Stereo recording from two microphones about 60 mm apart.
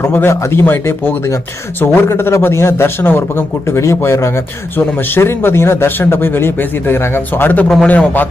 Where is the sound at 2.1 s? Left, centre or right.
Left.